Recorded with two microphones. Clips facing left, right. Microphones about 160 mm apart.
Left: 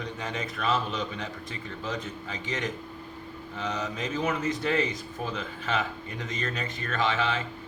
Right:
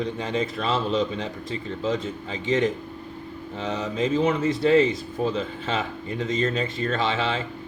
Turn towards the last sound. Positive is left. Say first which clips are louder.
# right 3 dB
turn(degrees=-25)  # may be behind; listen again after turning